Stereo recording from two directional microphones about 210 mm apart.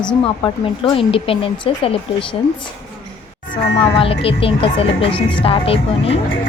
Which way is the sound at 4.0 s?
25° left (ahead or behind).